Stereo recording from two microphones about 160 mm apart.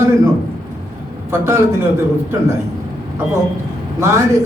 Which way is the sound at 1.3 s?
15° right (ahead or behind).